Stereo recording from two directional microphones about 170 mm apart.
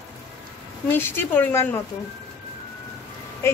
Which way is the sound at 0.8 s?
10° left (ahead or behind).